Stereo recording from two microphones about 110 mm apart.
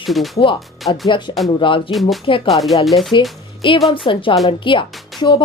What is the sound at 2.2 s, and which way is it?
Speech, 55° left (ahead or behind).